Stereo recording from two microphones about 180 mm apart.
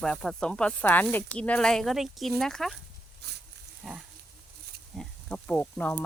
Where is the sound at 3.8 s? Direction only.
Centre (ahead or behind).